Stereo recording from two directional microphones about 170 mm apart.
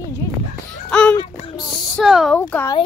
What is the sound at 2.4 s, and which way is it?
Speech, 10° left (ahead or behind).